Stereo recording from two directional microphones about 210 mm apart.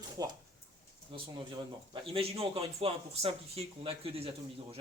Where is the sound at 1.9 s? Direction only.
25° right (ahead or behind).